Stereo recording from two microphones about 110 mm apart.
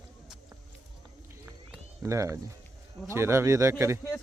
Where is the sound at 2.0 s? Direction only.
30° right (ahead or behind).